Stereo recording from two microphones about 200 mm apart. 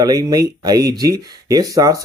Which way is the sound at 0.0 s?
20° right (ahead or behind).